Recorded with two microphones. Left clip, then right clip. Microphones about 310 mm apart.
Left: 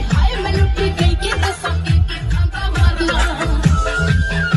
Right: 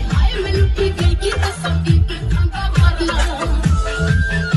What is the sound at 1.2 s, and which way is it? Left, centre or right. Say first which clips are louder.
Music: right 1 dB; centre.